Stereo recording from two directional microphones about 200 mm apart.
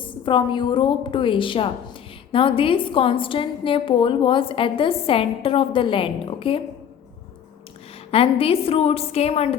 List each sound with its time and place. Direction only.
0.0 s a woman's voice: 25° left (ahead or behind)
8.1 s a woman's voice: 30° left (ahead or behind)